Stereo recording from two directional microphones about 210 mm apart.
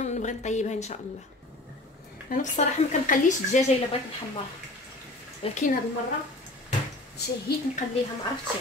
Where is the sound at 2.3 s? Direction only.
35° left (ahead or behind).